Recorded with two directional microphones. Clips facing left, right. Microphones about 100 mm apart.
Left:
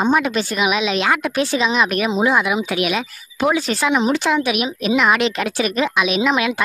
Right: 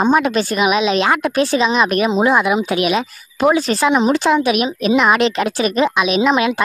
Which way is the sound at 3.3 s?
40° right (ahead or behind).